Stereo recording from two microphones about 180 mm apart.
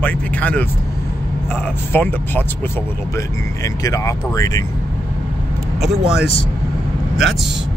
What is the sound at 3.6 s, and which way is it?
Speech, 20° left (ahead or behind).